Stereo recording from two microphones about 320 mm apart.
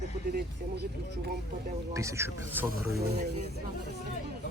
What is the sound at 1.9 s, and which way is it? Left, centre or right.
Speech, centre.